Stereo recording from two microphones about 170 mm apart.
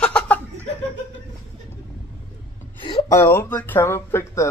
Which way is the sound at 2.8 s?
30° left (ahead or behind).